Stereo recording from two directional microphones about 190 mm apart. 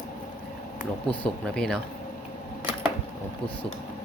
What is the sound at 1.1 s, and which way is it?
Speech, 5° left (ahead or behind).